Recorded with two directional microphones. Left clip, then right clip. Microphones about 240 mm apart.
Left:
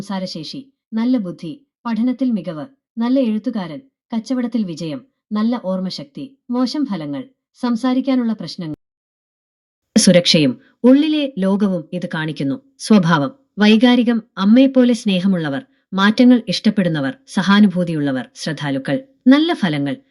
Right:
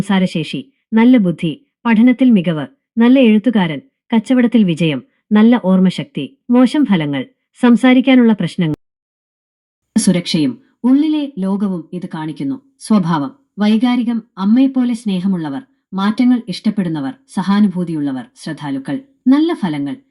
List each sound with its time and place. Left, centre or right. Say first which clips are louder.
0.0 s speech: right 8 dB; right
9.9 s speech: left 5 dB; centre